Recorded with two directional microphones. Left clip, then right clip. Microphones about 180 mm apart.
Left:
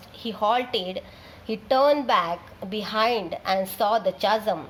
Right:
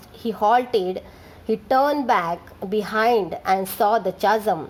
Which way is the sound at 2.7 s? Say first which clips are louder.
Right 4 dB; 45° right (ahead or behind).